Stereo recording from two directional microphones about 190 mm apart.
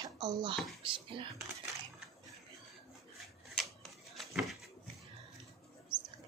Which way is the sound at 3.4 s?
Centre (ahead or behind).